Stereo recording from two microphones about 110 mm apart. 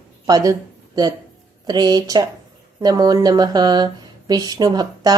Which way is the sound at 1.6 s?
40° right (ahead or behind).